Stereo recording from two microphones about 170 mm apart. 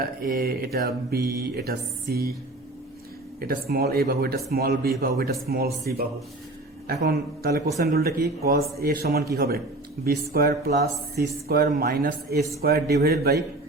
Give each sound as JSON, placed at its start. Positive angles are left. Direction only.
{"t": 0.0, "sound": "mantra", "side_deg": -60}
{"t": 3.4, "sound": "mantra", "side_deg": -60}
{"t": 6.8, "sound": "speech", "side_deg": -65}
{"t": 9.3, "sound": "mantra", "side_deg": -65}